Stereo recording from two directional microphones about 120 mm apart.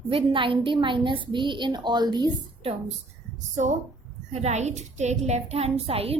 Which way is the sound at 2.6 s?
50° right (ahead or behind).